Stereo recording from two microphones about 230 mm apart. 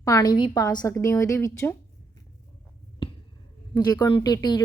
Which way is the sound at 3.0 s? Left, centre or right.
Left.